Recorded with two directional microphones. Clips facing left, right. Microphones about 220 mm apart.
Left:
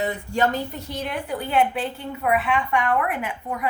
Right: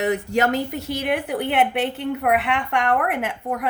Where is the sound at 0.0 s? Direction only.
75° right (ahead or behind).